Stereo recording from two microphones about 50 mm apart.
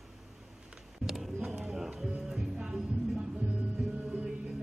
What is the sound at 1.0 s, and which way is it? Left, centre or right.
Music, centre.